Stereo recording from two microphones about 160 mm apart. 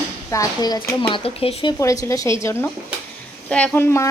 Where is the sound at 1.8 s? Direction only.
20° left (ahead or behind).